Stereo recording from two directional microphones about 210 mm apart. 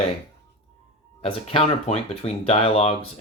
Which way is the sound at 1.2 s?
30° left (ahead or behind).